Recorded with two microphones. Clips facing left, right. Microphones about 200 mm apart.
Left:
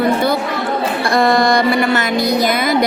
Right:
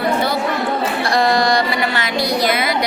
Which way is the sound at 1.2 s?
55° left (ahead or behind).